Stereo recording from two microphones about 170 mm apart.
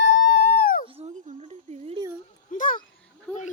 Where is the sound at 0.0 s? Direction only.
90° left; by 0.9 s 60° left (ahead or behind).